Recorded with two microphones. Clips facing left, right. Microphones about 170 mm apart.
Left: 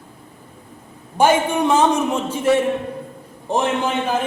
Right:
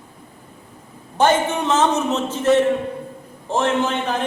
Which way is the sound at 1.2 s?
10° left (ahead or behind).